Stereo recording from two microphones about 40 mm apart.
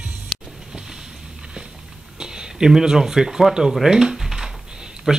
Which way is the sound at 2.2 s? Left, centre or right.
Centre.